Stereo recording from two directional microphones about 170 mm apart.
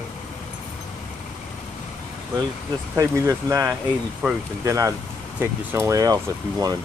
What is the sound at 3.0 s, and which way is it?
Speech, 15° right (ahead or behind).